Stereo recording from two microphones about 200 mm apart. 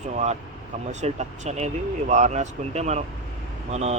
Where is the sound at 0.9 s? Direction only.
35° right (ahead or behind).